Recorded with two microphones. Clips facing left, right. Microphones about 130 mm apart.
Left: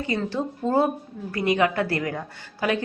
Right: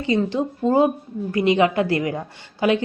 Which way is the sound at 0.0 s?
20° right (ahead or behind).